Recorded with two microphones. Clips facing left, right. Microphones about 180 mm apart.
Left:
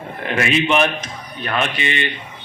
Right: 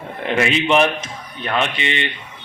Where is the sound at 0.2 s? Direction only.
25° right (ahead or behind).